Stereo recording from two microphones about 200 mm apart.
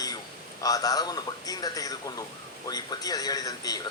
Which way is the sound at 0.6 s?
20° left (ahead or behind).